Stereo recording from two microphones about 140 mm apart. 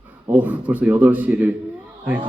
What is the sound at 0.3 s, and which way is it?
A man's voice, 10° right (ahead or behind).